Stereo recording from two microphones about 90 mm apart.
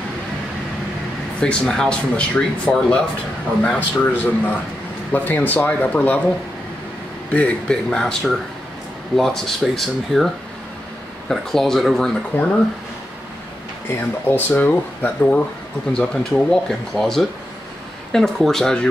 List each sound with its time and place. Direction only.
1.4 s speech: 5° left (ahead or behind)
7.3 s speech: 10° left (ahead or behind)
12.3 s speech: 20° left (ahead or behind)
13.8 s speech: 20° left (ahead or behind)
15.9 s speech: 10° left (ahead or behind)